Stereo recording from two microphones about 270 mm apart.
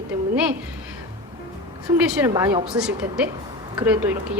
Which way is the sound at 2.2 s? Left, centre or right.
Centre.